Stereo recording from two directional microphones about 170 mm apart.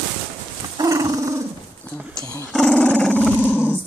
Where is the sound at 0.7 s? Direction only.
20° right (ahead or behind).